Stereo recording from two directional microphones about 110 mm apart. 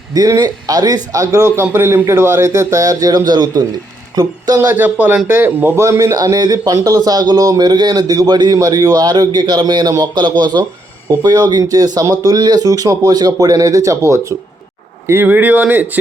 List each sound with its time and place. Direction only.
0.1 s a man's voice: 35° right (ahead or behind)
4.6 s a man's voice: 15° right (ahead or behind)